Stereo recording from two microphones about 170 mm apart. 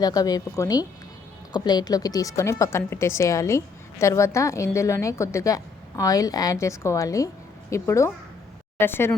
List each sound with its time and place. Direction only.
0.0 s a woman's voice: 20° left (ahead or behind)